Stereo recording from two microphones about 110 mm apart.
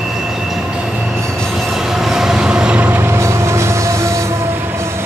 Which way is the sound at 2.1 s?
5° right (ahead or behind).